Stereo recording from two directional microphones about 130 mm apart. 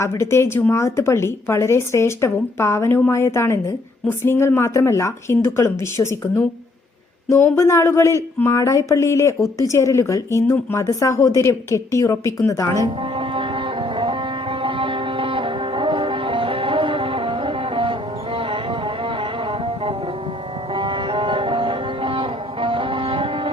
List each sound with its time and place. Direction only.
0.0 s speech: 20° left (ahead or behind)
13.0 s music: 45° right (ahead or behind)